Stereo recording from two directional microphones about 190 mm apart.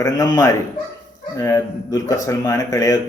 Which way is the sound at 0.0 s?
20° left (ahead or behind).